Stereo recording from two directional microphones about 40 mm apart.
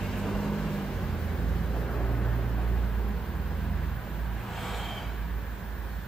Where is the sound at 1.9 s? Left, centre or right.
Left.